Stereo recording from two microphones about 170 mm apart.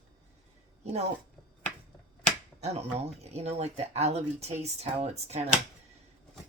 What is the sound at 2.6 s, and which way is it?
Speech, 40° right (ahead or behind).